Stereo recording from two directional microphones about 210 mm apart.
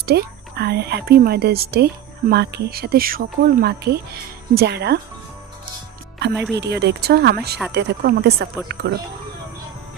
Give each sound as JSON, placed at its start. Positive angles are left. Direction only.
{"t": 0.0, "sound": "speech", "side_deg": -50}
{"t": 6.5, "sound": "speech", "side_deg": -55}